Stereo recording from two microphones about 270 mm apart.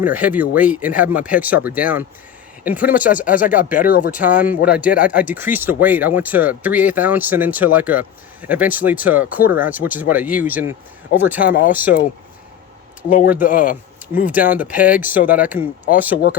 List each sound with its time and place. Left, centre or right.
0.0 s speech: centre
3.2 s speech: left
4.4 s speech: centre
13.1 s speech: left
14.3 s speech: centre